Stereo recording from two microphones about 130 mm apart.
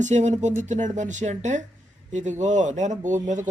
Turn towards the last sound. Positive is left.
turn(degrees=-70)  # may be behind; listen again after turning